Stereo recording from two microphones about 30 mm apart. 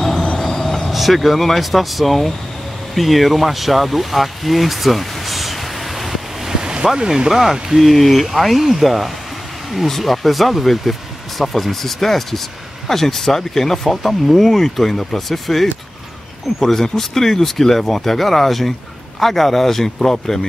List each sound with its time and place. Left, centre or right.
0.0 s train: centre
1.1 s speech: centre
2.9 s vehicle: centre
6.5 s waves: right
7.1 s speech: centre
7.9 s speech: centre